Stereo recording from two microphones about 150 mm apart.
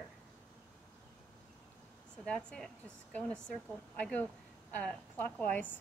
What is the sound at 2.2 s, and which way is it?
Speech, 5° left (ahead or behind).